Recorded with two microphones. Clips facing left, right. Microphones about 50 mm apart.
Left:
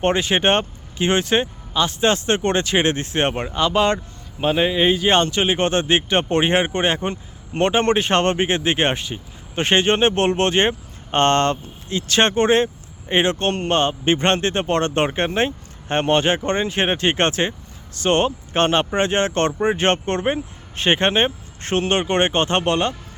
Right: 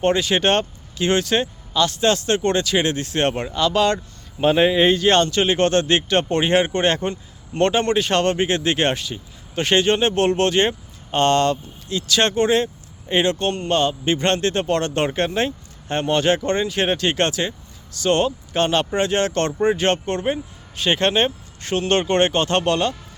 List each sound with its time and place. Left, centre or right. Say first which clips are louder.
0.0 s speech: even; left
4.4 s speech: right 3 dB; centre
5.0 s speech: right 1 dB; left
21.0 s speech: even; left
21.8 s speech: right 2 dB; left